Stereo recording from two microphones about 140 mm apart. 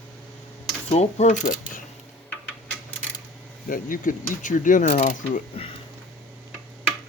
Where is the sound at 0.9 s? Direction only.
50° left (ahead or behind).